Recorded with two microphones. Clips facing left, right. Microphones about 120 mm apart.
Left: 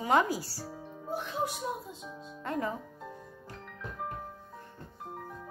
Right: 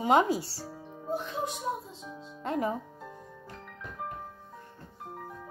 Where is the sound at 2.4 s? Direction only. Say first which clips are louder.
Right 3 dB; 20° right (ahead or behind).